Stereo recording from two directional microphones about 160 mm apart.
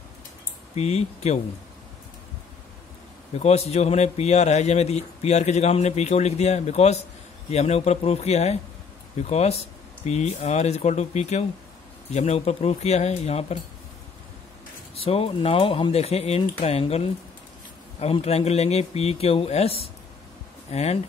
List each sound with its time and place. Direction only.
0.7 s a man's voice: 45° left (ahead or behind)
3.3 s a man's voice: 40° left (ahead or behind)
15.0 s speech: 40° left (ahead or behind)